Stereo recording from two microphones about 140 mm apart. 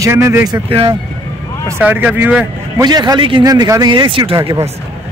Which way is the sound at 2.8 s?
30° right (ahead or behind).